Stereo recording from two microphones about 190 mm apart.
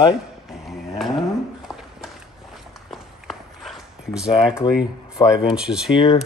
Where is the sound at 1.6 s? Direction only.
Centre (ahead or behind).